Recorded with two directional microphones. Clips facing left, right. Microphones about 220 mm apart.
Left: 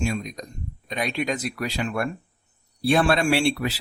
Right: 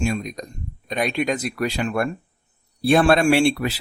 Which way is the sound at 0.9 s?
50° right (ahead or behind).